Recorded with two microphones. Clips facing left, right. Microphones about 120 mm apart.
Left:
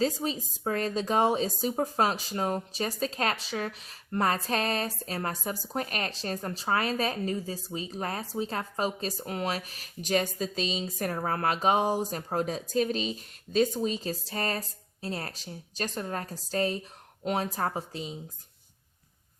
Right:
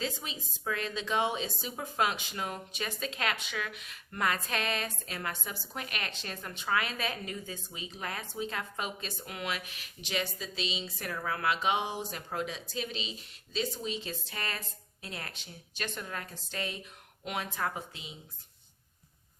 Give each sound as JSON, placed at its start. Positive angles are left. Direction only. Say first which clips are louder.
{"t": 0.0, "sound": "a woman's voice", "louder": "left 9 dB", "side_deg": 40}